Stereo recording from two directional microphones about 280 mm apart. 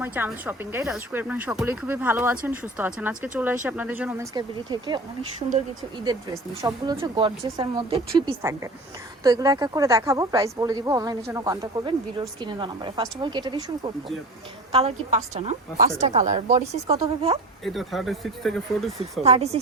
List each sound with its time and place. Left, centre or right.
0.0 s a woman's voice: centre; by 17.0 s right
17.6 s speech: centre
19.2 s a woman's voice: right